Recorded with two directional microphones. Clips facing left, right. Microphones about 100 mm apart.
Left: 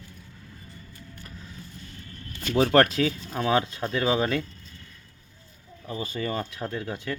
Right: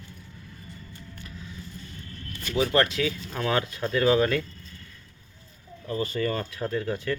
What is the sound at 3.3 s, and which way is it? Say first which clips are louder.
A man's voice: left 2 dB; 20° left (ahead or behind).